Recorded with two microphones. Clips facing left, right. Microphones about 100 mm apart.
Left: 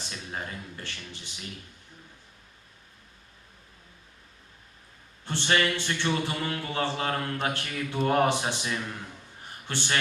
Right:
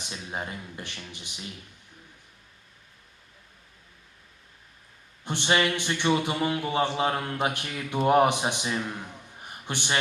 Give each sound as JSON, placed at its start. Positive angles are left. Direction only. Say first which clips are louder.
{"t": 0.0, "sound": "speech", "louder": "right 2 dB", "side_deg": -20}
{"t": 5.2, "sound": "speech", "louder": "right 1 dB", "side_deg": -15}